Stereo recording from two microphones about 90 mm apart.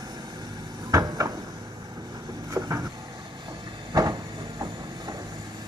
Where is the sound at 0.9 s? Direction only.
40° right (ahead or behind).